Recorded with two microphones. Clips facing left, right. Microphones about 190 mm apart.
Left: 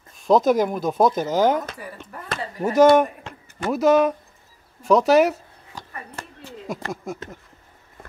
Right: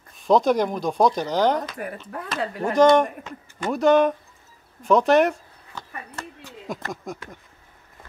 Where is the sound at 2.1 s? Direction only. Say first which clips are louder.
Right 2 dB; 80° right.